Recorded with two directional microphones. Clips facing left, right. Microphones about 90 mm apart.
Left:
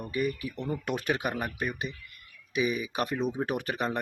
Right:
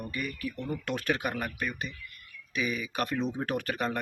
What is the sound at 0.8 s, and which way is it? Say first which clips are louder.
Speech: even; 15° left (ahead or behind).